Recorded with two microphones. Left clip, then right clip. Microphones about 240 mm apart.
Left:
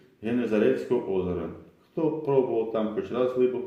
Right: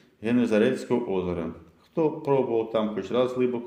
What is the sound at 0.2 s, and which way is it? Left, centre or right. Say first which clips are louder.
Speech: right 2 dB; right.